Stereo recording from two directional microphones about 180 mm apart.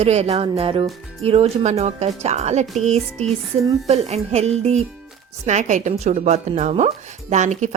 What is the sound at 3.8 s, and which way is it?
A woman's voice, 35° right (ahead or behind).